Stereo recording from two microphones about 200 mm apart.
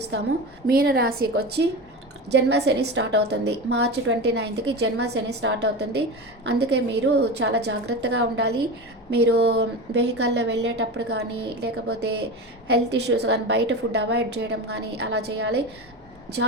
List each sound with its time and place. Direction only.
0.7 s a woman's voice: 50° right (ahead or behind)